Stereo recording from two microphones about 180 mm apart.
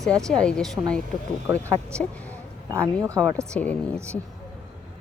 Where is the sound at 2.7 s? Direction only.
15° right (ahead or behind).